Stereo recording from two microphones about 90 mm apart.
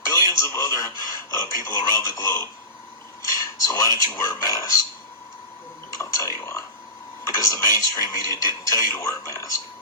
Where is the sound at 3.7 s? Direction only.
35° left (ahead or behind).